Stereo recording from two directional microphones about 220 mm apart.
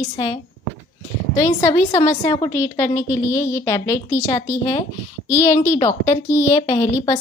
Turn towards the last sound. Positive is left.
turn(degrees=20)  # may be behind; listen again after turning